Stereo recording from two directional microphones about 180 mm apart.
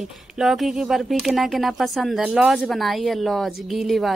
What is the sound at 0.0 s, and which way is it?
Speech, centre (ahead or behind).